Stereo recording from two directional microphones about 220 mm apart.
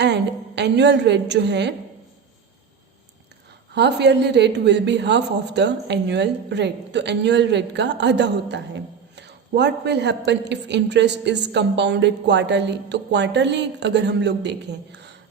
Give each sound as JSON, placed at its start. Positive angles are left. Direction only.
{"t": 0.0, "sound": "a woman's voice", "side_deg": -50}
{"t": 3.8, "sound": "a woman's voice", "side_deg": -50}